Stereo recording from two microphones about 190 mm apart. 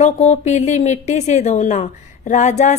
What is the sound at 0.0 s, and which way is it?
A woman's voice, 35° left (ahead or behind).